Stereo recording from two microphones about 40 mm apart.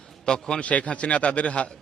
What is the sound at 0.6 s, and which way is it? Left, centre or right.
A man's voice, left.